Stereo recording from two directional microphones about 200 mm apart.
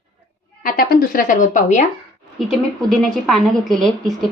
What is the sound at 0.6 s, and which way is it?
A woman's voice, 45° left (ahead or behind).